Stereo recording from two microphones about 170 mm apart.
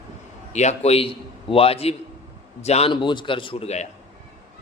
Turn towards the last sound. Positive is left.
turn(degrees=40)  # may be behind; listen again after turning